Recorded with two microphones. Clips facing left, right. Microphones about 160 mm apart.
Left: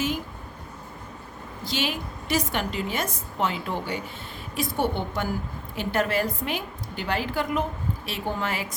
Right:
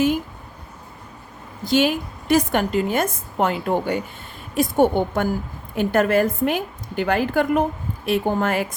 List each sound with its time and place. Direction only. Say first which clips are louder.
1.6 s a woman's voice: right 10 dB; 50° right (ahead or behind)